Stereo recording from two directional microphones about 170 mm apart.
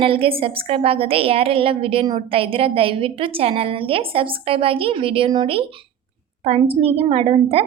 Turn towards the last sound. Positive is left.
turn(degrees=-35)  # may be behind; listen again after turning